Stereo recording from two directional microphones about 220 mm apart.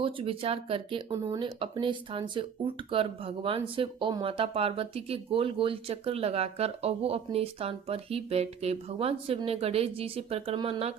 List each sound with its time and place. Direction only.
0.0 s speech: 25° right (ahead or behind)